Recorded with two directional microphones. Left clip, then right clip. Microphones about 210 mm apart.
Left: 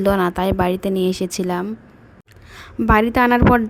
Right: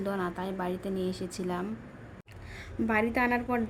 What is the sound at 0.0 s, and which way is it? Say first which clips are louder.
A woman's voice: left 16 dB; 40° left (ahead or behind).